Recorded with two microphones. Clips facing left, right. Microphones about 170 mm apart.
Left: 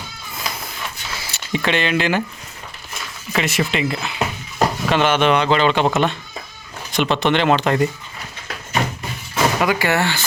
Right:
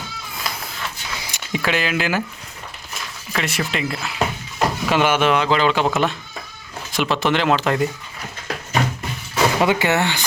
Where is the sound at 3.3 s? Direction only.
Centre (ahead or behind).